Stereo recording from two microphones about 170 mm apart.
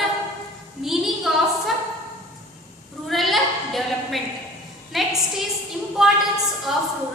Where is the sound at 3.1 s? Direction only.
Centre (ahead or behind).